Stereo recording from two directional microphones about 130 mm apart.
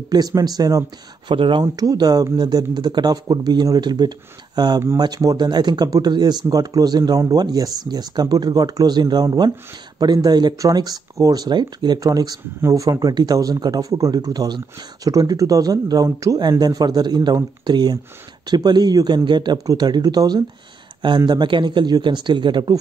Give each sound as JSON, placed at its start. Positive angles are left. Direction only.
{"t": 0.1, "sound": "speech", "side_deg": -30}
{"t": 1.3, "sound": "speech", "side_deg": -45}
{"t": 1.6, "sound": "speech", "side_deg": -30}